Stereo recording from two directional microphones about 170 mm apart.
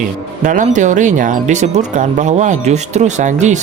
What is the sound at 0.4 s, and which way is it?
Speech, 45° right (ahead or behind).